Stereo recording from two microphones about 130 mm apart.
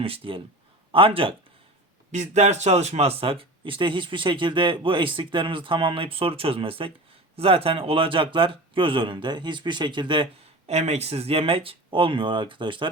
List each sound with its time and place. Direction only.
0.0 s a man's voice: 45° right (ahead or behind)
2.1 s speech: 65° right (ahead or behind); by 10.2 s 40° right (ahead or behind)
10.7 s speech: 55° right (ahead or behind); by 12.9 s 40° right (ahead or behind)